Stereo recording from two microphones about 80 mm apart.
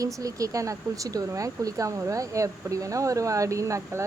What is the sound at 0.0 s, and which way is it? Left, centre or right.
A woman's voice, right.